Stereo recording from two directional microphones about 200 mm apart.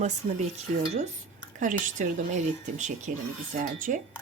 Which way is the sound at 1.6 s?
40° right (ahead or behind).